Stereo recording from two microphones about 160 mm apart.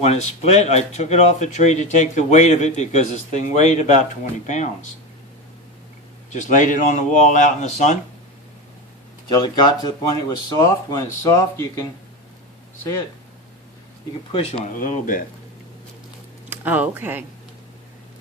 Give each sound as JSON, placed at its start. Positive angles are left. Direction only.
{"t": 0.0, "sound": "a man's voice", "side_deg": 45}
{"t": 6.3, "sound": "a man's voice", "side_deg": 50}
{"t": 9.3, "sound": "speech", "side_deg": 25}
{"t": 14.3, "sound": "speech", "side_deg": 40}
{"t": 14.8, "sound": "speech", "side_deg": 55}
{"t": 16.5, "sound": "speech", "side_deg": -10}